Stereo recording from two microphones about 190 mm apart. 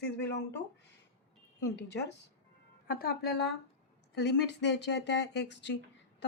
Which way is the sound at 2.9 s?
50° left (ahead or behind).